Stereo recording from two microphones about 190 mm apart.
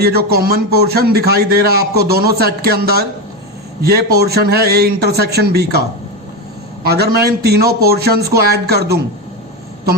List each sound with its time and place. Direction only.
0.0 s speech: 55° right (ahead or behind)
6.8 s speech: 55° right (ahead or behind)